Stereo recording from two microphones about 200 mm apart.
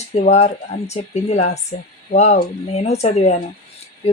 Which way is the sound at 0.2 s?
35° left (ahead or behind).